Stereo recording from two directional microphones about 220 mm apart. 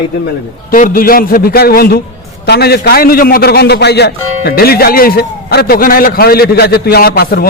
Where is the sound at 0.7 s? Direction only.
40° left (ahead or behind).